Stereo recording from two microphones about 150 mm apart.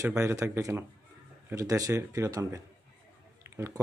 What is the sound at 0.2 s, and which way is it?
Speech, 20° right (ahead or behind).